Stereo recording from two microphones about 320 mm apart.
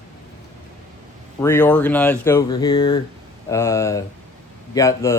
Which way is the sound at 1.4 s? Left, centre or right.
Centre.